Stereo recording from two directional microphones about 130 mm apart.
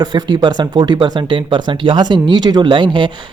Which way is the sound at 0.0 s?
30° right (ahead or behind).